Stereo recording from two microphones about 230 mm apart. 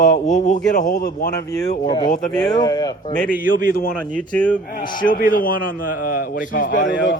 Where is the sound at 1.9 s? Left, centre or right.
Centre.